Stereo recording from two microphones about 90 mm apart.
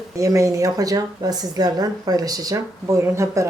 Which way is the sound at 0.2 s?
35° right (ahead or behind).